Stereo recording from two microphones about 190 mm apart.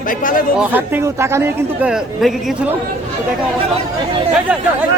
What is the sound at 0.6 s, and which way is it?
Speech, 10° right (ahead or behind).